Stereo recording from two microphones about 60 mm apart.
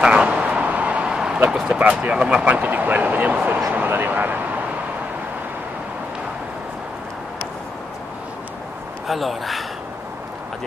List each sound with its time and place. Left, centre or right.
0.0 s a sound: centre
1.5 s speech: centre; by 4.4 s right
9.0 s speech: centre